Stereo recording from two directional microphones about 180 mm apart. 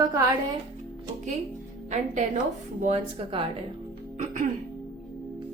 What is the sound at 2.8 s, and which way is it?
A woman's voice, 40° right (ahead or behind).